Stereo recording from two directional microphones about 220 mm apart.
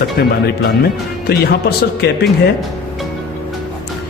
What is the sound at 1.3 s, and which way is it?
Speech, 45° left (ahead or behind).